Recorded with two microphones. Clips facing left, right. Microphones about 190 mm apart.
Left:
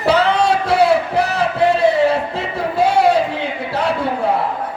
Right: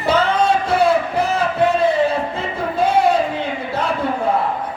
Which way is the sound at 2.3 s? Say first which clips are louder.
Left 2 dB; 70° left (ahead or behind).